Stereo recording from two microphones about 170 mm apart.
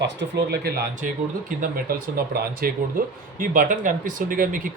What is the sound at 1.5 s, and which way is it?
A man's voice, 55° right (ahead or behind).